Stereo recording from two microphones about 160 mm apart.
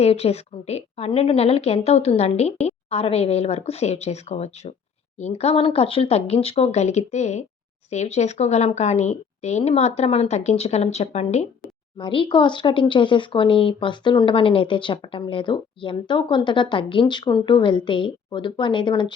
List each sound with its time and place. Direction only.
0.0 s speech: 40° left (ahead or behind)
11.9 s speech: 30° left (ahead or behind)